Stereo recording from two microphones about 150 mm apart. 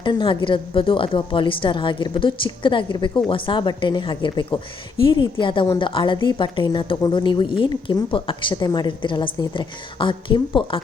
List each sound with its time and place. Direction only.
0.0 s a woman's voice: 30° left (ahead or behind)